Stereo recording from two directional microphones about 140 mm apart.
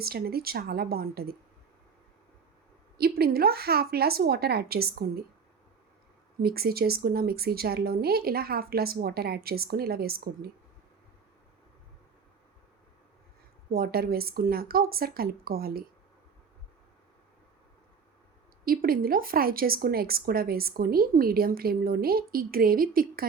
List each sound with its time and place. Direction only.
0.0 s speech: 90° right
3.0 s speech: 90° right
6.4 s speech: 90° right
13.7 s speech: 90° right
18.6 s speech: 90° right